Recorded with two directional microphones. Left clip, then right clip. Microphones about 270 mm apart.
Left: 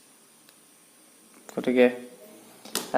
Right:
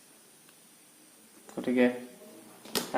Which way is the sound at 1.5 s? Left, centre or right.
Left.